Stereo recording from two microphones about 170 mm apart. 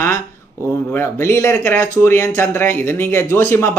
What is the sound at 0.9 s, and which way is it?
Speech, 15° left (ahead or behind).